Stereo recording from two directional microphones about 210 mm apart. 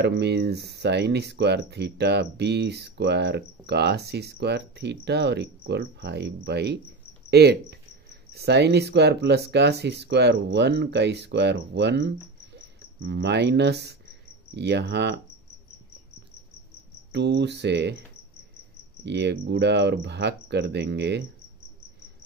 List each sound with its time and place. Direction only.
0.0 s speech: 55° right (ahead or behind)
17.1 s speech: 55° right (ahead or behind)
19.0 s speech: 55° right (ahead or behind)